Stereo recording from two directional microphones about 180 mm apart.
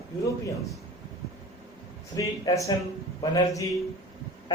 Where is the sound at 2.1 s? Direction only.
20° left (ahead or behind).